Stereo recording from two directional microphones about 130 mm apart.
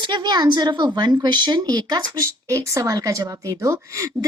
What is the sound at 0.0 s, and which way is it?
Speech, 35° right (ahead or behind).